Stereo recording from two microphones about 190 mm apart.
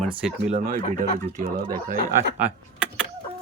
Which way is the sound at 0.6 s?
45° right (ahead or behind).